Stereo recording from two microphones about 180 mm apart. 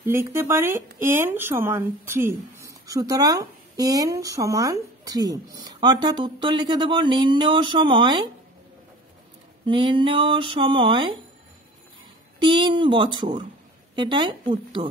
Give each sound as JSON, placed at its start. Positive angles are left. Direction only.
{"t": 0.0, "sound": "speech", "side_deg": -15}
{"t": 9.7, "sound": "speech", "side_deg": -25}
{"t": 12.4, "sound": "speech", "side_deg": -25}